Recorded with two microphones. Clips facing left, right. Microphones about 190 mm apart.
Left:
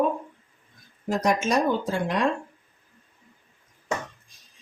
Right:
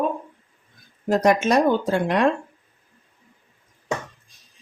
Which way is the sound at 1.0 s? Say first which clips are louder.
Right 5 dB; 65° right (ahead or behind).